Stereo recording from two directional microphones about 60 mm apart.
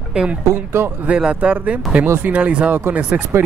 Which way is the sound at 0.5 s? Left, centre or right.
Right.